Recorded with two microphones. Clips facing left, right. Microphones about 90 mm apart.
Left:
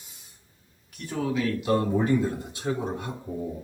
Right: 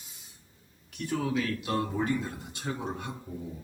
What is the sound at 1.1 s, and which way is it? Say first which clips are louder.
Speech: left 3 dB; 5° left (ahead or behind).